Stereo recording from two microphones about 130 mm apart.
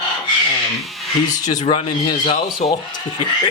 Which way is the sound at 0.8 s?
Centre (ahead or behind).